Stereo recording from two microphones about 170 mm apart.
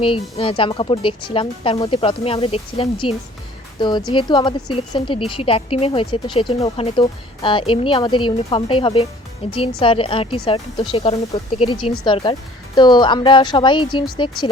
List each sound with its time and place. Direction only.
0.0 s speech: 30° left (ahead or behind)